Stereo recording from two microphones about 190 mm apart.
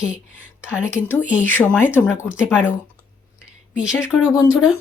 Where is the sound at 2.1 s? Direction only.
5° right (ahead or behind).